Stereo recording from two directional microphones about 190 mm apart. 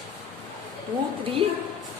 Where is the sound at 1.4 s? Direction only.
30° right (ahead or behind).